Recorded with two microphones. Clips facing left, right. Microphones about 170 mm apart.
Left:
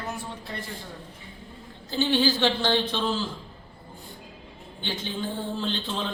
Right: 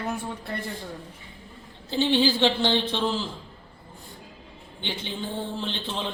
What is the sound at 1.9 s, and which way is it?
A man's voice, 25° right (ahead or behind).